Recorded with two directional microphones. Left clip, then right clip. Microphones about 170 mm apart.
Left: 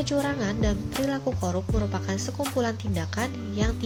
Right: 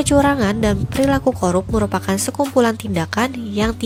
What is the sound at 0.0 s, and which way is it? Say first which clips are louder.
Speech: right 12 dB; 45° right (ahead or behind).